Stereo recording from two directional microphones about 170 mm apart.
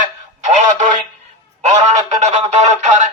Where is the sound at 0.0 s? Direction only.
45° right (ahead or behind).